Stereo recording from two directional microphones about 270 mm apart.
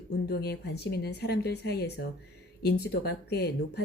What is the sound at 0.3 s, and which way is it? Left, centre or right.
A woman's voice, left.